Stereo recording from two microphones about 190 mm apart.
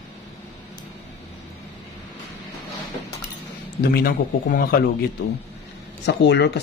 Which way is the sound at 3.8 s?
55° left (ahead or behind).